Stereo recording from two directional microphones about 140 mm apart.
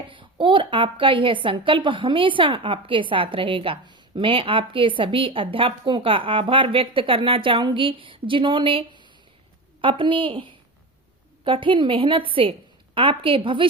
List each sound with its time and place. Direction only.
0.1 s a woman's voice: 35° right (ahead or behind)